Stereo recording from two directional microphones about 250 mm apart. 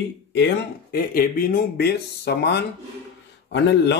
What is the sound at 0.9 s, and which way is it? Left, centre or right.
Speech, left.